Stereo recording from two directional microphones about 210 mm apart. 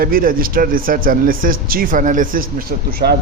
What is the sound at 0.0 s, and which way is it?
A man's voice, 45° right (ahead or behind).